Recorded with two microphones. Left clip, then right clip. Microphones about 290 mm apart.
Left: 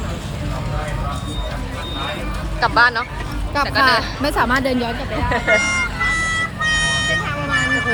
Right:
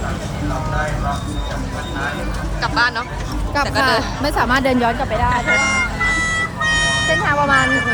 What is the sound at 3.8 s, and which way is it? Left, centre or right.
Speech, centre.